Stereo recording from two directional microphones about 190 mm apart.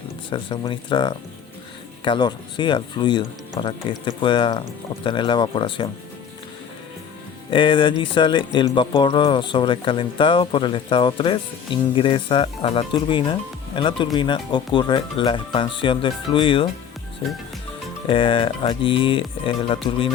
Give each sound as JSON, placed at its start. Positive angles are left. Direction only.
{"t": 0.3, "sound": "speech", "side_deg": 25}
{"t": 7.5, "sound": "speech", "side_deg": 25}
{"t": 18.1, "sound": "speech", "side_deg": 25}